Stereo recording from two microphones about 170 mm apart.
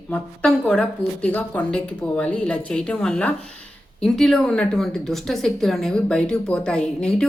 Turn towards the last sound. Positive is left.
turn(degrees=5)  # may be behind; listen again after turning